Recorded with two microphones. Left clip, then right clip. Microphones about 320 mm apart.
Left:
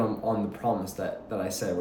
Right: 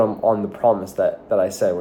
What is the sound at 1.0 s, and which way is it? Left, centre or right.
Speech, centre.